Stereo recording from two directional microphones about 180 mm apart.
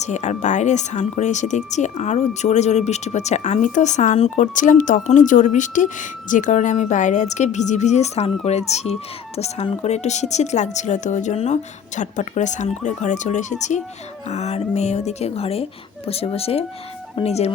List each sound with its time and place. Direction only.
0.0 s speech: 40° left (ahead or behind)